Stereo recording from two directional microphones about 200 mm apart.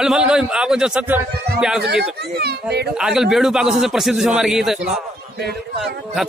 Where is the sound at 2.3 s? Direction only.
55° right (ahead or behind).